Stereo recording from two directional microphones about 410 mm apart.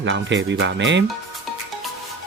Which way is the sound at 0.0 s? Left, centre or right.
Right.